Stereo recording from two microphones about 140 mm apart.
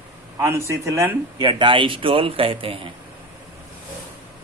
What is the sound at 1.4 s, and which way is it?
A man's voice, 35° right (ahead or behind).